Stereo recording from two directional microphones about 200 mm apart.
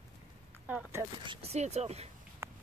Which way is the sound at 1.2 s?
25° right (ahead or behind).